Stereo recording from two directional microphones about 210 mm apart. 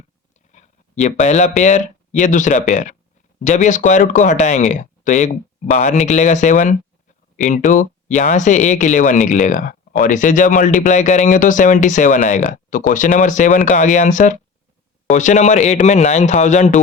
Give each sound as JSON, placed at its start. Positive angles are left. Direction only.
{"t": 0.5, "sound": "speech", "side_deg": 35}